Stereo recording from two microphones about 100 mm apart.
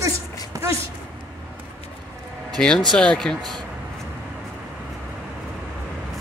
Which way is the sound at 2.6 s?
10° left (ahead or behind).